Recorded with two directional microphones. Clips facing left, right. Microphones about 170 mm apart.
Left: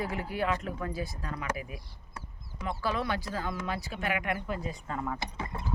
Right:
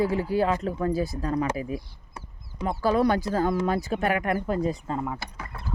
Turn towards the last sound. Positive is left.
turn(degrees=20)  # may be behind; listen again after turning